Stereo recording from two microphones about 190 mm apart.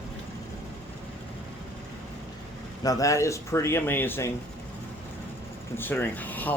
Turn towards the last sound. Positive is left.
turn(degrees=10)  # may be behind; listen again after turning